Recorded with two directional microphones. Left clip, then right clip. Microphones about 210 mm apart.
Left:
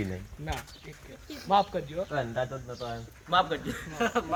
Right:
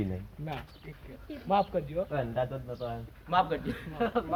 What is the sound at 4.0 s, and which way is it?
Speech, 20° left (ahead or behind).